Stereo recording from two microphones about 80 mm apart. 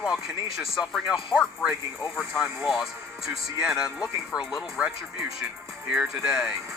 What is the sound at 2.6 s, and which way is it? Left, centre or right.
Speech, centre.